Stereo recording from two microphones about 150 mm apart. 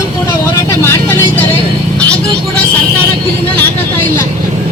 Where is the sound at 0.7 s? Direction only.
15° left (ahead or behind).